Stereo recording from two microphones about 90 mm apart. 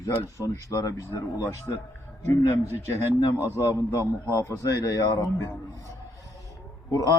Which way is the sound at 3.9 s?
30° right (ahead or behind).